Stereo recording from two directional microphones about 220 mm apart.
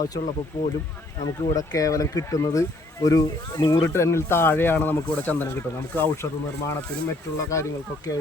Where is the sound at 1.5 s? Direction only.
15° left (ahead or behind).